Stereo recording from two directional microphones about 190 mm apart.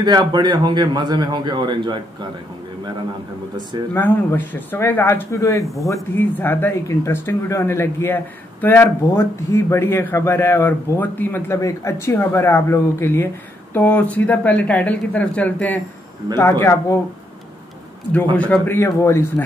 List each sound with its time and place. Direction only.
0.0 s a man's voice: 20° right (ahead or behind)
3.9 s speech: 10° left (ahead or behind)
18.4 s speech: 10° left (ahead or behind)